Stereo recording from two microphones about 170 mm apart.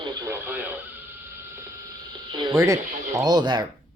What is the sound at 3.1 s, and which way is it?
Speech, 25° right (ahead or behind).